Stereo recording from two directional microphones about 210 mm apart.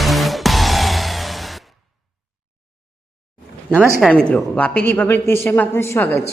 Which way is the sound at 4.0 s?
5° left (ahead or behind).